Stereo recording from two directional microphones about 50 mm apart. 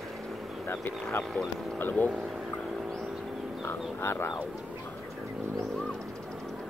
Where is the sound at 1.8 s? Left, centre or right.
Left.